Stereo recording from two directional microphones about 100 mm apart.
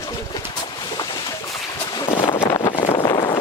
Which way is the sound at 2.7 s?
60° left (ahead or behind).